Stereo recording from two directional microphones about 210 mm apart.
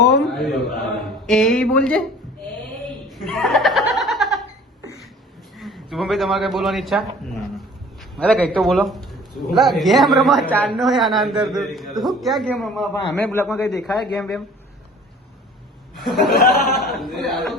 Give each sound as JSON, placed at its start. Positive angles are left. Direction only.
{"t": 0.2, "sound": "mantra", "side_deg": 0}
{"t": 1.3, "sound": "a man's voice", "side_deg": 5}
{"t": 3.1, "sound": "laughter", "side_deg": 0}
{"t": 5.5, "sound": "a man's voice", "side_deg": 0}
{"t": 8.1, "sound": "a man's voice", "side_deg": 5}
{"t": 16.0, "sound": "a man's voice", "side_deg": 0}
{"t": 16.3, "sound": "a man's voice", "side_deg": 45}
{"t": 16.9, "sound": "a man's voice", "side_deg": 0}